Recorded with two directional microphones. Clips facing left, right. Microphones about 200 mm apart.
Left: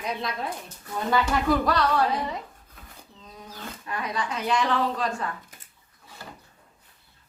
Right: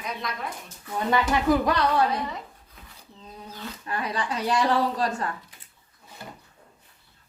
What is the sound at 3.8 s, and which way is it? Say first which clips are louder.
Speech: right 1 dB; 30° right (ahead or behind).